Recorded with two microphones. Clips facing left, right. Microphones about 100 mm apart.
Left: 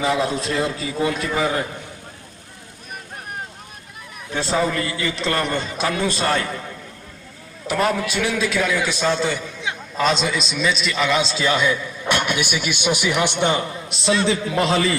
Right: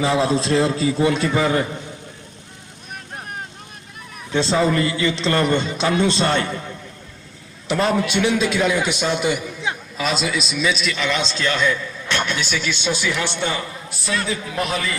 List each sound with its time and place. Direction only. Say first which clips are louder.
0.0 s a man's voice: right 2 dB; 30° right (ahead or behind)
4.4 s a man's voice: right 3 dB; 25° right (ahead or behind)
7.7 s a man's voice: right 1 dB; 25° right (ahead or behind)
10.0 s a man's voice: left 3 dB; 5° right (ahead or behind); by 14.9 s 30° left (ahead or behind)